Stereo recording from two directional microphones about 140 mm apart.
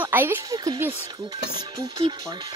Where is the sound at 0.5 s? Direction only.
25° right (ahead or behind).